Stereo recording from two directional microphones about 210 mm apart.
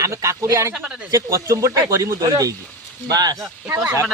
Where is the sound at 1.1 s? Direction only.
15° right (ahead or behind).